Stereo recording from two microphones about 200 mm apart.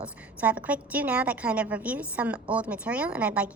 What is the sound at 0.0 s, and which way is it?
A woman's voice, 5° right (ahead or behind).